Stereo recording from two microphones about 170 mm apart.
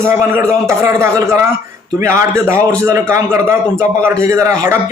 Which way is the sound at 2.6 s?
15° right (ahead or behind).